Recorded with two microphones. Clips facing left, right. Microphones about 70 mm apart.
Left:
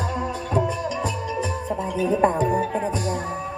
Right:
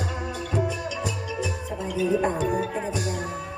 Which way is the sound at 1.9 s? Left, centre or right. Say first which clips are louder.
Left 3 dB; left.